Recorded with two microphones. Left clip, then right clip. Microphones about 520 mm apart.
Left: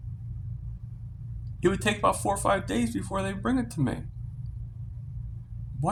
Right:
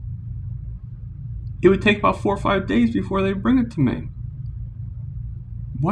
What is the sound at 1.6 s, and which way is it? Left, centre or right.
Speech, left.